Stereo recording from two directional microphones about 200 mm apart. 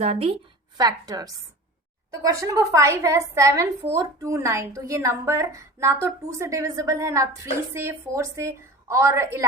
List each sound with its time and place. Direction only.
0.0 s a woman's voice: 30° right (ahead or behind)
0.8 s a woman's voice: 20° right (ahead or behind)